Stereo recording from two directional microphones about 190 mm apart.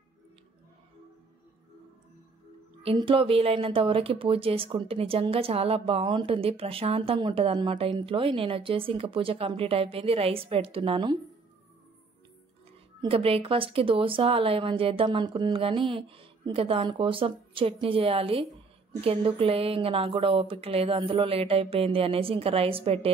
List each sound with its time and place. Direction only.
2.8 s speech: 30° right (ahead or behind)
13.0 s speech: 30° right (ahead or behind)